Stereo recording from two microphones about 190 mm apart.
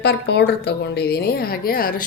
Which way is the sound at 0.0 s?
60° left (ahead or behind).